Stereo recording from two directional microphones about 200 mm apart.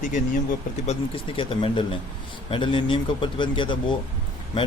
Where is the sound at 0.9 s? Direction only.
25° left (ahead or behind).